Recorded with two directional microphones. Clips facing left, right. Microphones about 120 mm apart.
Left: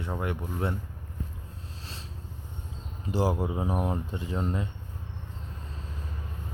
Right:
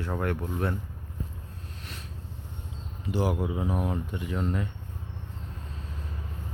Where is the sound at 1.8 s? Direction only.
30° left (ahead or behind).